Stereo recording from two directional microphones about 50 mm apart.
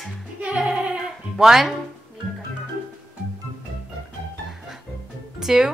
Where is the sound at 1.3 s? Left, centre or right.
Centre.